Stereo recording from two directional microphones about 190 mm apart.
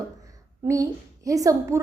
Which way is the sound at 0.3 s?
15° right (ahead or behind).